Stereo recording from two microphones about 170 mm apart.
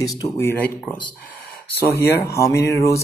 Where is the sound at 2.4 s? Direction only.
15° left (ahead or behind).